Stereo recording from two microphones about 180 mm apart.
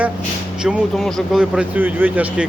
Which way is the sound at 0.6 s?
Centre (ahead or behind).